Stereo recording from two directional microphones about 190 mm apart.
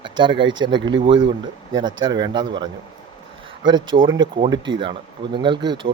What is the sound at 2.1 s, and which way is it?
Speech, 25° right (ahead or behind).